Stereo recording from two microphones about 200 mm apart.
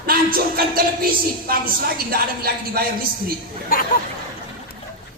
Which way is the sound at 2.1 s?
50° right (ahead or behind).